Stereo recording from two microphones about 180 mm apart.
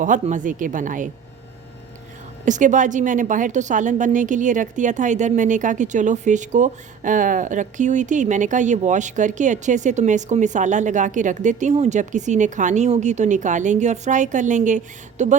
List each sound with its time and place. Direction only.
0.0 s a woman's voice: 45° right (ahead or behind)
2.4 s a woman's voice: 45° right (ahead or behind)